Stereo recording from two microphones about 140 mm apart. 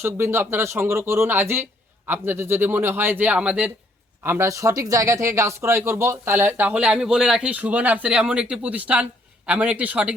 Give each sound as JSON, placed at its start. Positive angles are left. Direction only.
{"t": 0.0, "sound": "speech", "side_deg": -15}